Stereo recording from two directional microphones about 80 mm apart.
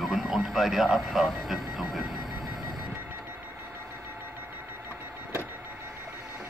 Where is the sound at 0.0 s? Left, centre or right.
Centre.